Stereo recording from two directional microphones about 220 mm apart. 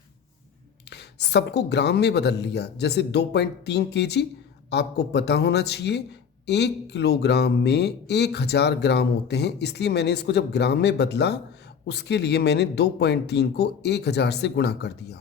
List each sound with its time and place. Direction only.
0.9 s speech: 50° left (ahead or behind)